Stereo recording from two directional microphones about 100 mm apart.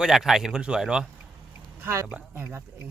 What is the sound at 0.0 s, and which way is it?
Speech, 5° right (ahead or behind).